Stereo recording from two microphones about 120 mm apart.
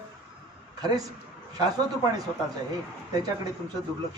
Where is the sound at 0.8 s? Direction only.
30° right (ahead or behind).